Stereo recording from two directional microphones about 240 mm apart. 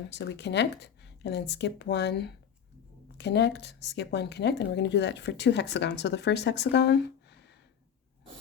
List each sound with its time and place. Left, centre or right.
0.1 s speech: left